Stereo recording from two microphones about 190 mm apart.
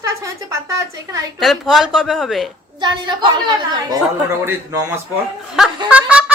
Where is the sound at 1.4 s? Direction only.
Centre (ahead or behind).